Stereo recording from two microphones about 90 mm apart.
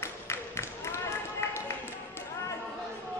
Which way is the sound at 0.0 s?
30° left (ahead or behind).